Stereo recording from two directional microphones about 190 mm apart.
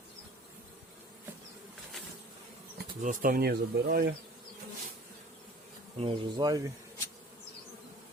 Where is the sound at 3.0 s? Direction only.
50° right (ahead or behind).